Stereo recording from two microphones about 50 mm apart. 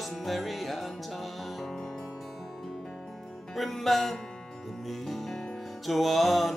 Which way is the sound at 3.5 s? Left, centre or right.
Centre.